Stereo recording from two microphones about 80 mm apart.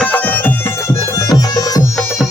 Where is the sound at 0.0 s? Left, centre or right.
Centre.